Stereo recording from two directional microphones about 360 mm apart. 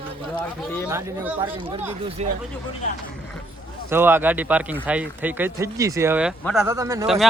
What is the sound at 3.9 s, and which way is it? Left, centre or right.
Speech, centre.